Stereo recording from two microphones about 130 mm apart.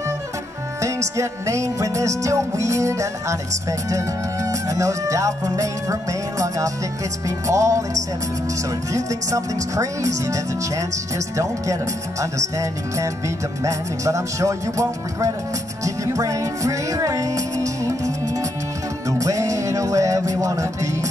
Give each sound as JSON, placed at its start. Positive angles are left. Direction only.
{"t": 0.7, "sound": "speech", "side_deg": -25}
{"t": 17.8, "sound": "music", "side_deg": -25}